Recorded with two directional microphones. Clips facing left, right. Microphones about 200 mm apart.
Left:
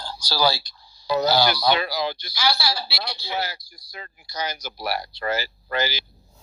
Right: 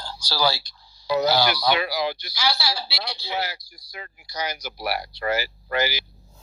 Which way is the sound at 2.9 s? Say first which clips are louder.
Even; 50° left (ahead or behind).